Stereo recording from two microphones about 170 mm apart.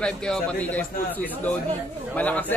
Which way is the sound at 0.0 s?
5° left (ahead or behind).